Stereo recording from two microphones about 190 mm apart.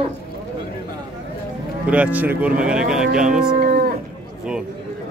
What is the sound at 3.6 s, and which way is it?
Livestock, 50° right (ahead or behind).